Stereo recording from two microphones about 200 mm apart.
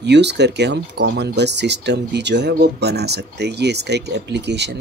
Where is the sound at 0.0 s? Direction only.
60° right (ahead or behind).